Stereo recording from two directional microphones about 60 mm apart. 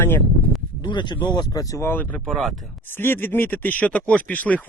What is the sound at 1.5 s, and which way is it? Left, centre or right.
Speech, left.